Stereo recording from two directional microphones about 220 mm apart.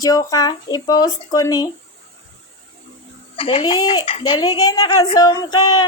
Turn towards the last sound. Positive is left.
turn(degrees=20)  # may be behind; listen again after turning